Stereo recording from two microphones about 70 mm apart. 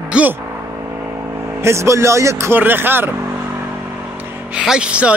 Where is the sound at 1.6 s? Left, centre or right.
Right.